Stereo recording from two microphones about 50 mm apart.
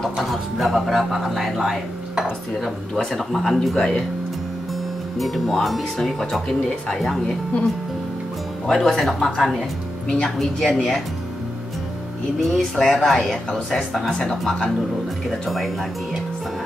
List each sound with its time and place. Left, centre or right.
0.0 s speech: centre
3.0 s speech: centre
5.2 s speech: centre
8.7 s speech: centre
10.0 s speech: centre
10.4 s speech: centre
12.4 s speech: centre